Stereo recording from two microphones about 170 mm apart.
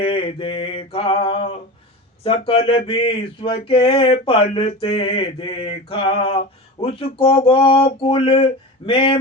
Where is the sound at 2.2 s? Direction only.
35° left (ahead or behind).